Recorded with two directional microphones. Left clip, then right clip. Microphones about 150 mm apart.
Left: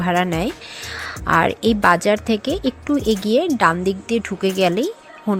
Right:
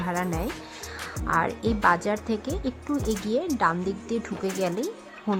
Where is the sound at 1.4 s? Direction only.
25° left (ahead or behind).